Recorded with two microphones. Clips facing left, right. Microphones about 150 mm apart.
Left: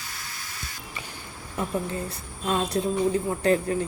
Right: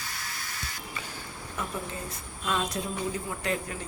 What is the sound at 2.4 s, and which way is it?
Speech, 30° left (ahead or behind).